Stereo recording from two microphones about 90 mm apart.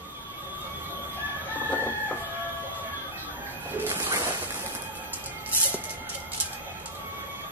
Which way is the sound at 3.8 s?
25° right (ahead or behind).